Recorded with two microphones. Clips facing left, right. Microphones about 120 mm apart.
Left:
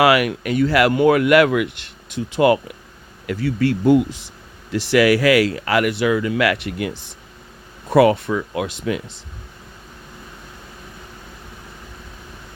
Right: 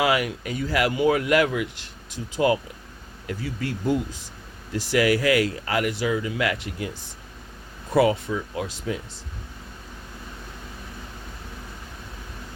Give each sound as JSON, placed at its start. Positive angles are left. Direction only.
{"t": 0.0, "sound": "speech", "side_deg": 75}